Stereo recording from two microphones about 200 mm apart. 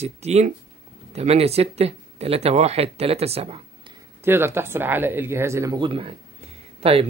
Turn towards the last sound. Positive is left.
turn(degrees=-30)  # may be behind; listen again after turning